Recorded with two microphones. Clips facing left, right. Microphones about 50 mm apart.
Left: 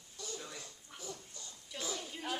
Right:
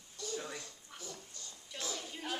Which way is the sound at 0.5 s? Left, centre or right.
Centre.